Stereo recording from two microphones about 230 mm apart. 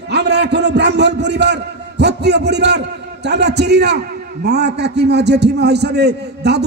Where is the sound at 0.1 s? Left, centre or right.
Right.